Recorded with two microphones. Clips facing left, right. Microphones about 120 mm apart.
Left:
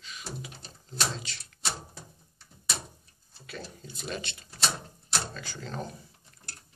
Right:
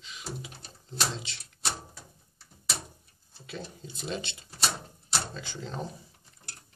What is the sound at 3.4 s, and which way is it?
Speech, 20° right (ahead or behind).